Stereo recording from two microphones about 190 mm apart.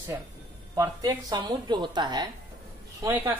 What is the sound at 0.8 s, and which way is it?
Speech, 20° right (ahead or behind).